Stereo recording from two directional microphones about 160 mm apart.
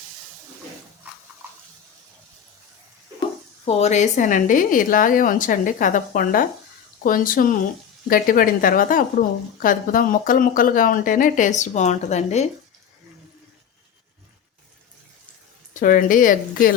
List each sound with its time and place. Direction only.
3.7 s speech: 45° left (ahead or behind)
15.7 s speech: 55° left (ahead or behind)